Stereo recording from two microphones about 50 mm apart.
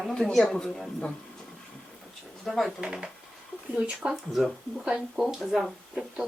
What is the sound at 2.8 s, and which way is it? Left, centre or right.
Speech, centre.